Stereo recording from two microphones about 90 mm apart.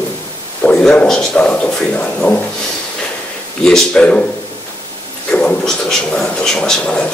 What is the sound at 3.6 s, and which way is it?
Speech, 5° left (ahead or behind).